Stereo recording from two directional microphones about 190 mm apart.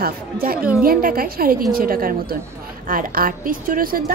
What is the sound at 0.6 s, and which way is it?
Speech, 5° right (ahead or behind).